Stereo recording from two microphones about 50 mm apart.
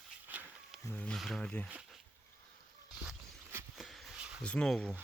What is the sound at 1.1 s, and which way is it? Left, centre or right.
Speech, centre.